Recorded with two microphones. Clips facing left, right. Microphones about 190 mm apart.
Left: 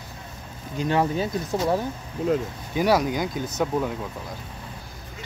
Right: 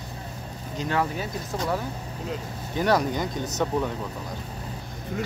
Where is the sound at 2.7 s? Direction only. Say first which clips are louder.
Left 2 dB; 10° left (ahead or behind).